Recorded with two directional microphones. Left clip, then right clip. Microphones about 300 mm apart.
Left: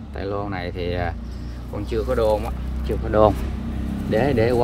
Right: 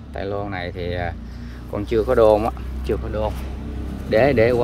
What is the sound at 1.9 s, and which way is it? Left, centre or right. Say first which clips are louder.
Speech: right 6 dB; centre.